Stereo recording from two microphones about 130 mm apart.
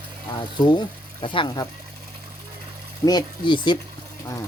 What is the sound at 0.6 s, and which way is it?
Speech, 35° left (ahead or behind).